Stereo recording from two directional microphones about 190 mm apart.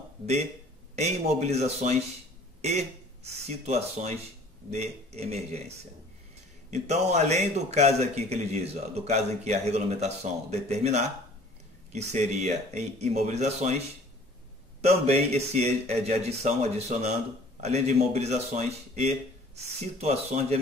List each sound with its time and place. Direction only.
0.9 s a man's voice: 35° right (ahead or behind)